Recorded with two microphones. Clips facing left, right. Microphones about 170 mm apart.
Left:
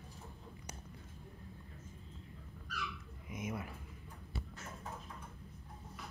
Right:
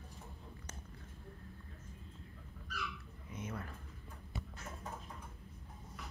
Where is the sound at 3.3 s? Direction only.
10° left (ahead or behind).